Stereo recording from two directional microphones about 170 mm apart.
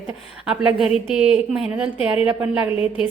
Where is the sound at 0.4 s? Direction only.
5° right (ahead or behind).